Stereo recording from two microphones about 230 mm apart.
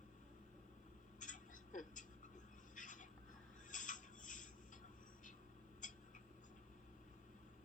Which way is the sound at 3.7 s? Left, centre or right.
Left.